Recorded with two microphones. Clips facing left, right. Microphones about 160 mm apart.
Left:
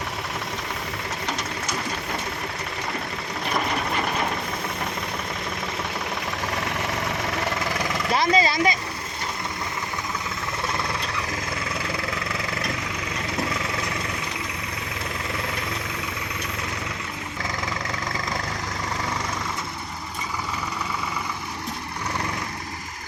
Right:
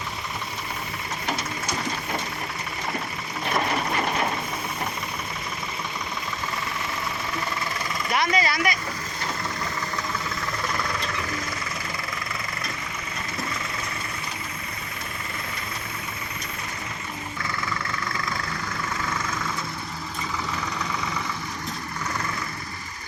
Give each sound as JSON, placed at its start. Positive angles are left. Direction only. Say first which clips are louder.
{"t": 7.3, "sound": "vehicle", "louder": "left 4 dB", "side_deg": 75}
{"t": 8.1, "sound": "vehicle", "louder": "left 3 dB", "side_deg": 30}